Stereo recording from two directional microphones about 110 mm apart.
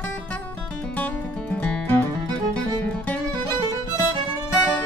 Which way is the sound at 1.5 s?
10° left (ahead or behind).